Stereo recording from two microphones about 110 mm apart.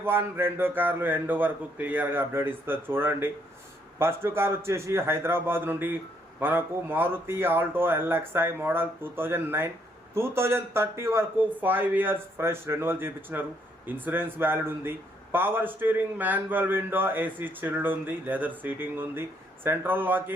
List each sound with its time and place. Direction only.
0.0 s a man's voice: 20° right (ahead or behind)